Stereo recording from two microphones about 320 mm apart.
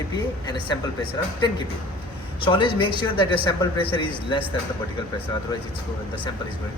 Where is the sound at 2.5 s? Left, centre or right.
Centre.